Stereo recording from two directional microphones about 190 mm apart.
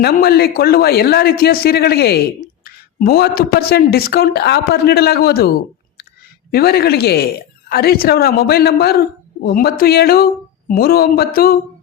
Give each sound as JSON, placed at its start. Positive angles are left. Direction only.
{"t": 0.0, "sound": "speech", "side_deg": 55}
{"t": 6.5, "sound": "a woman's voice", "side_deg": 55}